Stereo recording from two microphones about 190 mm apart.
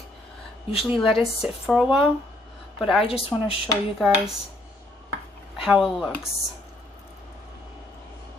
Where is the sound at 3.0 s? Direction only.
30° left (ahead or behind).